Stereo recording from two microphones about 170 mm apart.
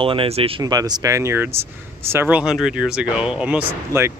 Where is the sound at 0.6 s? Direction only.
20° right (ahead or behind).